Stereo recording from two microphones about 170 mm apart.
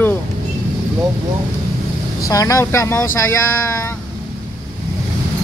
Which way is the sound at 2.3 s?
20° left (ahead or behind).